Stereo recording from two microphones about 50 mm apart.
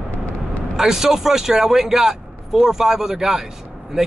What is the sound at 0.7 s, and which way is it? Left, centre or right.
Speech, centre.